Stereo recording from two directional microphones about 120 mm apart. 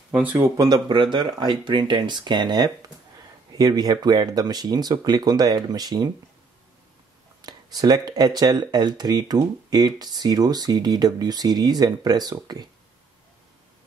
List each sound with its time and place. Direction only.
0.1 s speech: 15° right (ahead or behind)
0.6 s speech: 30° right (ahead or behind)
7.4 s speech: 35° right (ahead or behind)